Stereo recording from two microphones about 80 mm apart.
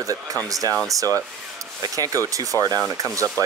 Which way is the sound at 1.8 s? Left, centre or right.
Right.